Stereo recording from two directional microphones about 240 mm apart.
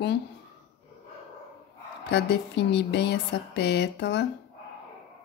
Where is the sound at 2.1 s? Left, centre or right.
Left.